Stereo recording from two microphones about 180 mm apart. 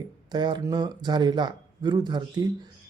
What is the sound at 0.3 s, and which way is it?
Speech, 25° right (ahead or behind).